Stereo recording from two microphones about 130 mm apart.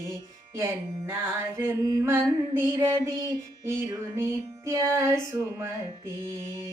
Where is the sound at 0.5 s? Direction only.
20° right (ahead or behind).